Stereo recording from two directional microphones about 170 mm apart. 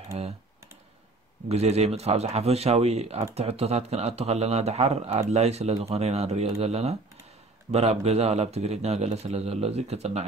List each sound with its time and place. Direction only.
0.1 s speech: 35° right (ahead or behind)
1.5 s a man's voice: 40° right (ahead or behind)